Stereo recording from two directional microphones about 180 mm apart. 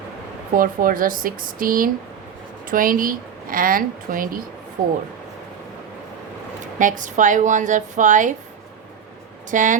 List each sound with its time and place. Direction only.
0.5 s a woman's voice: 50° right (ahead or behind)
6.7 s a woman's voice: 45° right (ahead or behind)
9.5 s a woman's voice: 45° right (ahead or behind)